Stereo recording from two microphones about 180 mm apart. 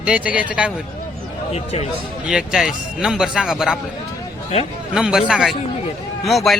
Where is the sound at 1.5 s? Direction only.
35° left (ahead or behind).